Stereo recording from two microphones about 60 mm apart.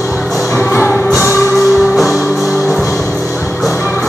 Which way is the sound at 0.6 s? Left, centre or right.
Left.